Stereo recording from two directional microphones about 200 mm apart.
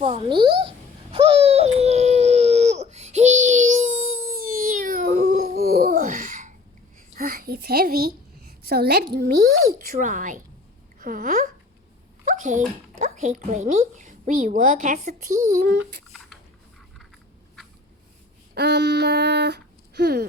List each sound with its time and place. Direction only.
0.0 s speech: 25° right (ahead or behind)
1.1 s baby cry: 30° right (ahead or behind)
7.1 s a sound: 45° right (ahead or behind)
9.1 s a child's voice: 50° right (ahead or behind)
18.5 s speech: 55° right (ahead or behind)